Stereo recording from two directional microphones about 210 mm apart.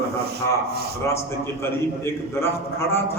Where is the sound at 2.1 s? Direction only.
10° left (ahead or behind).